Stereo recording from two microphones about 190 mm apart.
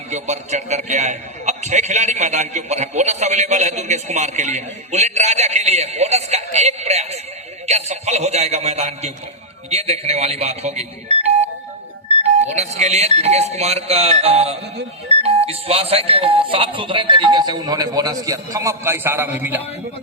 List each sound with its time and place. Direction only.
0.1 s a man's voice: 40° right (ahead or behind); by 19.6 s 10° right (ahead or behind)